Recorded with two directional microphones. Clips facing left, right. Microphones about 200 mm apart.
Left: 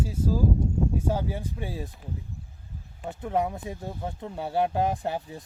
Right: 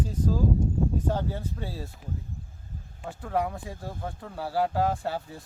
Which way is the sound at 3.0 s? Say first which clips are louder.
Left 2 dB; 20° left (ahead or behind).